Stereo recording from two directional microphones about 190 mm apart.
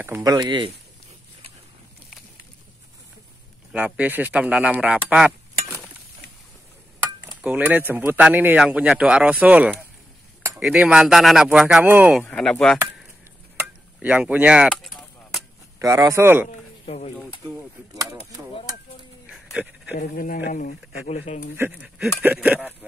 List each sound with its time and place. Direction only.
0.0 s speech: 15° right (ahead or behind)
3.7 s speech: 10° right (ahead or behind)
7.4 s a man's voice: 10° right (ahead or behind)
12.2 s speech: 5° left (ahead or behind)
13.6 s chop: 5° right (ahead or behind)
15.8 s a man's voice: 15° right (ahead or behind)
16.4 s a sound: 35° left (ahead or behind)
17.5 s a man's voice: 15° right (ahead or behind)
19.2 s a sound: 5° right (ahead or behind)
20.0 s speech: 45° left (ahead or behind)
21.5 s a man's voice: 10° right (ahead or behind)